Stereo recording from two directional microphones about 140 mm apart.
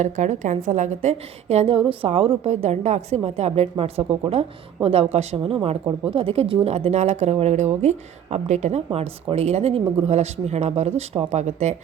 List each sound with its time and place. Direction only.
0.0 s a woman's voice: 60° right (ahead or behind)